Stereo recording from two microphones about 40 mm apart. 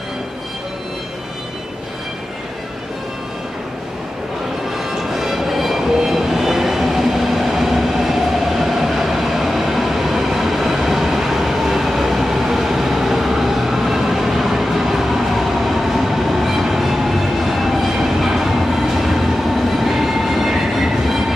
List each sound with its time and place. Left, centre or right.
4.7 s train: centre